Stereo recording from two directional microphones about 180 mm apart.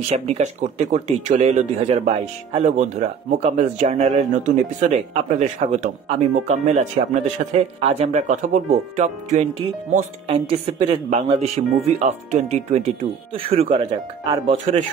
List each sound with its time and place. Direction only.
0.1 s speech: 40° right (ahead or behind)